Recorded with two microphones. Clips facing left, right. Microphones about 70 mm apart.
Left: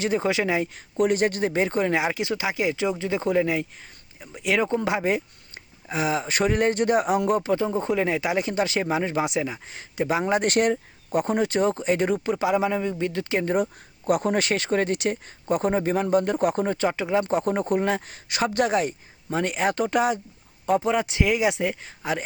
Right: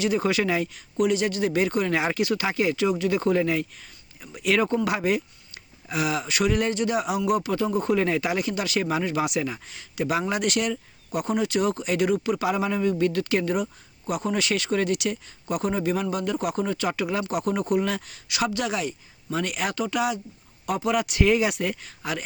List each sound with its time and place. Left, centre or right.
0.2 s speech: left
0.9 s speech: left
2.0 s speech: centre
10.4 s speech: left
14.1 s speech: left
20.7 s speech: left